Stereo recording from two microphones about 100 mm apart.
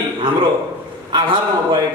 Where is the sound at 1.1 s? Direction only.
50° right (ahead or behind).